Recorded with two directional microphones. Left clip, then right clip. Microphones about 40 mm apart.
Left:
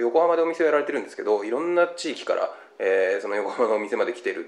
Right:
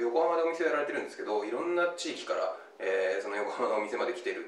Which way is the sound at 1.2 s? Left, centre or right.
Centre.